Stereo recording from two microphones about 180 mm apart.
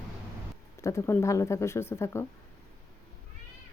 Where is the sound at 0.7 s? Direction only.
15° left (ahead or behind).